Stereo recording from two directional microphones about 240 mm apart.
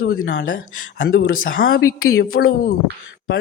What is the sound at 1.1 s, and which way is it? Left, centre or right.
A woman's voice, left.